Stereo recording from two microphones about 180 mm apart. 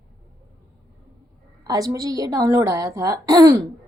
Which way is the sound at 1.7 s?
20° right (ahead or behind).